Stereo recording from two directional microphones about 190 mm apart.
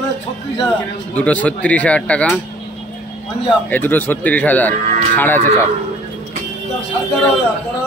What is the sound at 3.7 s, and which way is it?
A man's voice, 10° left (ahead or behind).